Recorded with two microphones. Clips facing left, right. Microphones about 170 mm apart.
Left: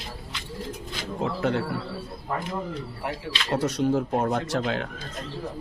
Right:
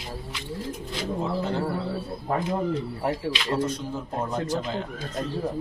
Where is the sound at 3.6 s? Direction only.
75° left (ahead or behind).